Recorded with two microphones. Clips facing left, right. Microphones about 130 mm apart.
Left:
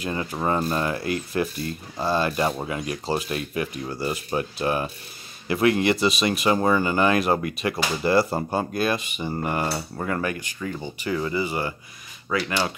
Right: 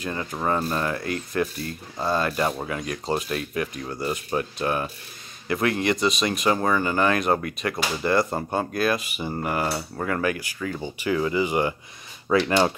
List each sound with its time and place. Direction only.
0.0 s speech: 10° left (ahead or behind)
2.0 s mechanisms: centre (ahead or behind)
5.5 s speech: 10° left (ahead or behind)
8.1 s mechanisms: 5° left (ahead or behind)
10.2 s speech: 5° right (ahead or behind)
12.4 s speech: 30° right (ahead or behind)